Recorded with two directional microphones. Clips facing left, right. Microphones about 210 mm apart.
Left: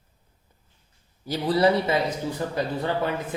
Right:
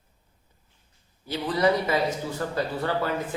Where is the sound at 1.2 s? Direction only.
35° left (ahead or behind).